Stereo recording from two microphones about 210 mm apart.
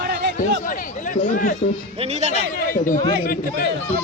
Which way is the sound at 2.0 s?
30° right (ahead or behind).